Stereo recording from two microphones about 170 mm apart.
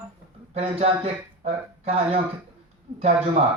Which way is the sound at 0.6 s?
35° right (ahead or behind).